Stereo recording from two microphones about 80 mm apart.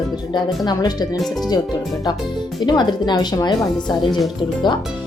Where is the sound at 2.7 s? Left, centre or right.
Left.